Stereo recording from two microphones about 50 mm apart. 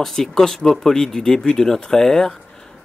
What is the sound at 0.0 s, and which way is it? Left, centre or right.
Speech, centre.